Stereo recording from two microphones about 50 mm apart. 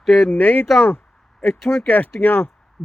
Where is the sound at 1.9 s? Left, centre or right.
Left.